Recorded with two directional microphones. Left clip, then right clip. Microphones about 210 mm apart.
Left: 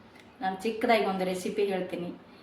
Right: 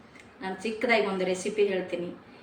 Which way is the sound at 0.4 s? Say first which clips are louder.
Left 1 dB; 20° left (ahead or behind).